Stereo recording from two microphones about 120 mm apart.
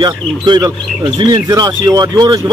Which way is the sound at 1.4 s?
30° right (ahead or behind).